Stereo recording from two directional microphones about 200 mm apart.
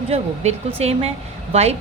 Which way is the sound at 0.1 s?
30° right (ahead or behind).